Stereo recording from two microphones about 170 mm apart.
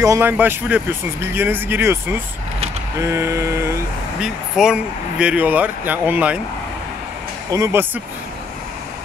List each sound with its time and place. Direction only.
0.0 s speech: 15° right (ahead or behind)
4.2 s speech: 5° right (ahead or behind)
7.5 s speech: 15° right (ahead or behind)